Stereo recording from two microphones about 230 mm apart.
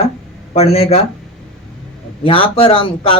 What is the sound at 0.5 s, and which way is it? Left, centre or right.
Speech, left.